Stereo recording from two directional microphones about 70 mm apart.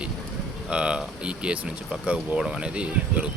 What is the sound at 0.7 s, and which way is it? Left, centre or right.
Speech, centre.